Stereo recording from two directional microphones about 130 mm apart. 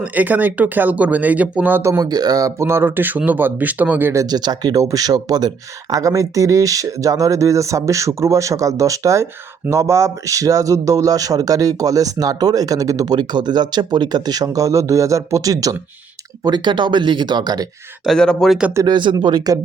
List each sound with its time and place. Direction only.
0.0 s speech: 15° right (ahead or behind); by 17.7 s 30° right (ahead or behind)
18.0 s speech: 5° left (ahead or behind)
18.7 s speech: 25° right (ahead or behind)
18.9 s speech: 35° right (ahead or behind)